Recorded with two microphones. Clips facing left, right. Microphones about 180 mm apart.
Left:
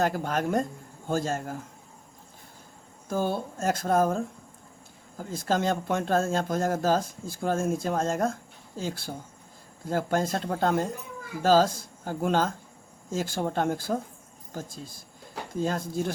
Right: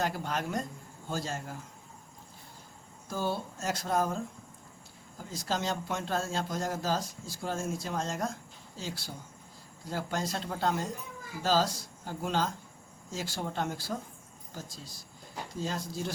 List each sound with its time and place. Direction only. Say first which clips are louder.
0.0 s a man's voice: left 6 dB; 50° left (ahead or behind)
3.1 s a man's voice: left 5 dB; 50° left (ahead or behind)